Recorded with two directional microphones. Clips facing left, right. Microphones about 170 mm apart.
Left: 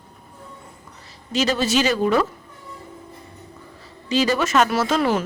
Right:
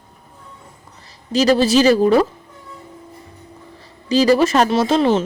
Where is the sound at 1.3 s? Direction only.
35° right (ahead or behind).